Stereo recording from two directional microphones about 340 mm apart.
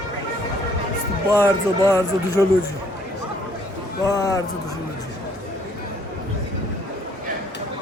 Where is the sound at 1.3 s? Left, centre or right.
Centre.